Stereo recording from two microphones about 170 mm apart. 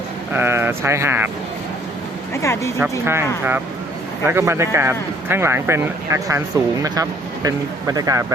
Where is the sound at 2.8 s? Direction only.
15° right (ahead or behind).